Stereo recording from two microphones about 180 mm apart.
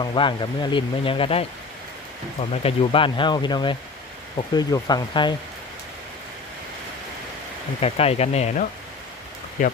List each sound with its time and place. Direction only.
0.0 s speech: 25° left (ahead or behind)
7.8 s speech: 35° left (ahead or behind)